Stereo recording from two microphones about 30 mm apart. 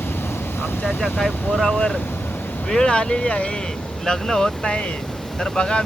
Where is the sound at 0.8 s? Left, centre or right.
Centre.